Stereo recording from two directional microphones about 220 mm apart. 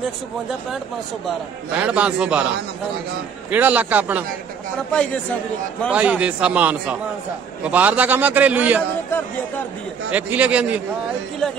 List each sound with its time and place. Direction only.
1.8 s a man's voice: 5° right (ahead or behind)
3.4 s a man's voice: 5° right (ahead or behind)
5.8 s a man's voice: 5° right (ahead or behind)
10.1 s a man's voice: 5° right (ahead or behind)